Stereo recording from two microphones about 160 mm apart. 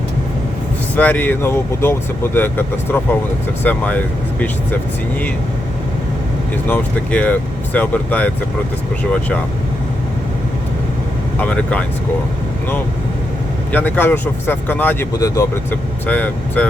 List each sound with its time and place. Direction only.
0.9 s speech: 10° left (ahead or behind)
6.7 s speech: 10° left (ahead or behind)
11.3 s speech: 10° left (ahead or behind)
13.7 s speech: 10° left (ahead or behind)